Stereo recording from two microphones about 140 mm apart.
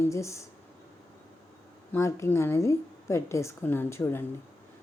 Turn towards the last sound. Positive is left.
turn(degrees=15)  # may be behind; listen again after turning